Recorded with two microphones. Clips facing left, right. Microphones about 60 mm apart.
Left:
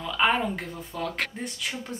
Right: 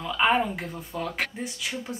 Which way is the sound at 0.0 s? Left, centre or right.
Centre.